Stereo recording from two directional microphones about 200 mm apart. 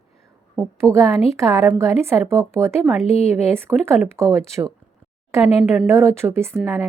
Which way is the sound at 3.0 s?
30° left (ahead or behind).